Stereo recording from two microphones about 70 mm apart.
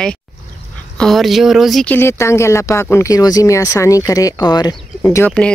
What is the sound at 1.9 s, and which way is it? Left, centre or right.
Speech, left.